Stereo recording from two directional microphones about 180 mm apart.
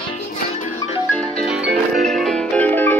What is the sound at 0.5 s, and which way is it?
Music, 40° left (ahead or behind).